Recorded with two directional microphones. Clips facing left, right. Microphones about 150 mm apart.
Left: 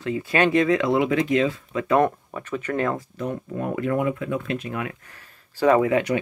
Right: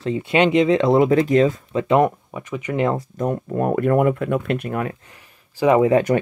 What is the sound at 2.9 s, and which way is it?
Speech, 45° right (ahead or behind).